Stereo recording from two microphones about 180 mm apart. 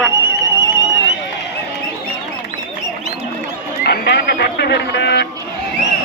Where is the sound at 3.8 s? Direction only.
65° left (ahead or behind).